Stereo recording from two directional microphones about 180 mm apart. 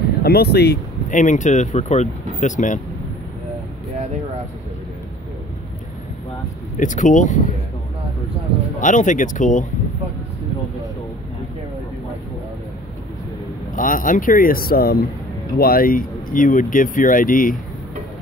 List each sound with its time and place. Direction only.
0.2 s speech: 60° left (ahead or behind)
1.1 s speech: 45° left (ahead or behind)
6.8 s speech: 45° left (ahead or behind)
8.7 s speech: 45° left (ahead or behind)
13.7 s speech: 50° left (ahead or behind)